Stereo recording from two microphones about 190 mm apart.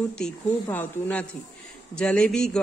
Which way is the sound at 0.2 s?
10° left (ahead or behind).